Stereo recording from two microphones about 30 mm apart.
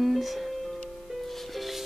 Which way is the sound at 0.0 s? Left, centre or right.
Centre.